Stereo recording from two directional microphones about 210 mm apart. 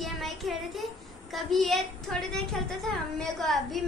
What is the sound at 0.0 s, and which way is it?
Child singing, centre (ahead or behind).